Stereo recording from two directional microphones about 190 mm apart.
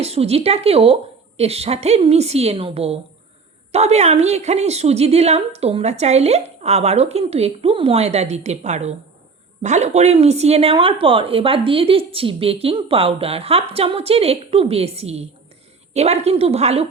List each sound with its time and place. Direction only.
0.0 s a woman's voice: 30° right (ahead or behind)